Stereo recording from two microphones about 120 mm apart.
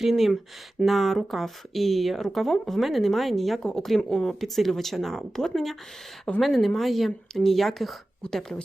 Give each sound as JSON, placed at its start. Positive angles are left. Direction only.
{"t": 0.0, "sound": "speech", "side_deg": 0}